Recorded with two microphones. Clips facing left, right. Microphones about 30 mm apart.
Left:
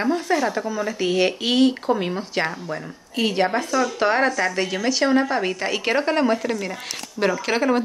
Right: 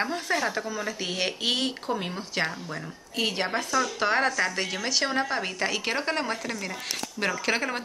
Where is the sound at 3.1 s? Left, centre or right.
Centre.